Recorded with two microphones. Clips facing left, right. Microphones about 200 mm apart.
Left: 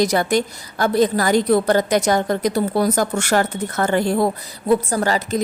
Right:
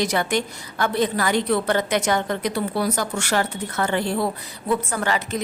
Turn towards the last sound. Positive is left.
turn(degrees=35)  # may be behind; listen again after turning